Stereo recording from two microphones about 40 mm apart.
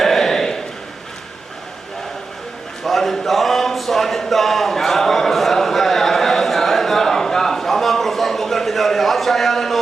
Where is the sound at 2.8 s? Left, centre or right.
Centre.